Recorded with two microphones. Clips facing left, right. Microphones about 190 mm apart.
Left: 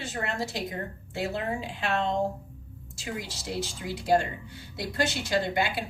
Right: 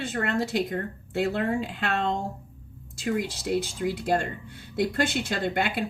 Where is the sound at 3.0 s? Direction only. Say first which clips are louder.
Right 8 dB; 55° right (ahead or behind).